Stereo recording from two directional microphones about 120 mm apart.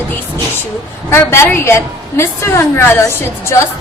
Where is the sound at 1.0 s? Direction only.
20° left (ahead or behind).